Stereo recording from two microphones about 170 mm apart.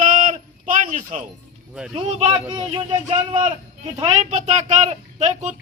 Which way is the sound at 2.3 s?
25° right (ahead or behind).